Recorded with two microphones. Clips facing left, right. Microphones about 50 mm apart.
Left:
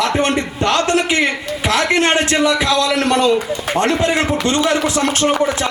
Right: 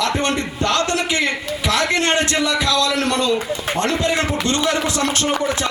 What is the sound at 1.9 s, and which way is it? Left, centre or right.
A man's voice, left.